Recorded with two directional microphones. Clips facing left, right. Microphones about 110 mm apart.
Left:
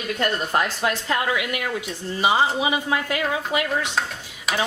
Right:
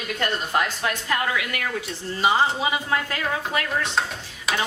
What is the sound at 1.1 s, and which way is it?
A woman's voice, 20° left (ahead or behind).